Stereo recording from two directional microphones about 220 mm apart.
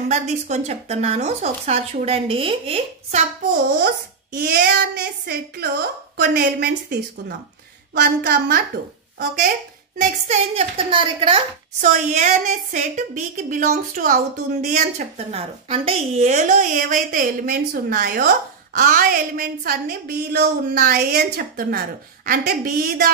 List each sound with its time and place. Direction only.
0.1 s speech: 30° right (ahead or behind)
4.4 s a child's voice: 45° right (ahead or behind)
9.9 s a woman's voice: 30° right (ahead or behind)